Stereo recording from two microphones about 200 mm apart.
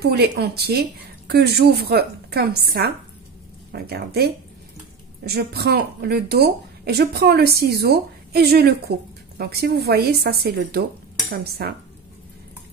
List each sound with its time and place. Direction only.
0.0 s speech: 55° right (ahead or behind)